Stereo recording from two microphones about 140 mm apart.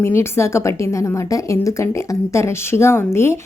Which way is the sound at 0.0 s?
20° left (ahead or behind).